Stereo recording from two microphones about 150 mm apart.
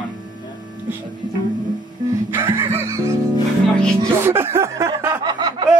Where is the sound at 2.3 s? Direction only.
15° right (ahead or behind).